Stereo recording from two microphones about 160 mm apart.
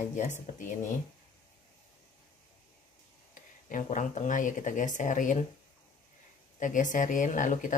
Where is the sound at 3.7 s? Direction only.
50° left (ahead or behind).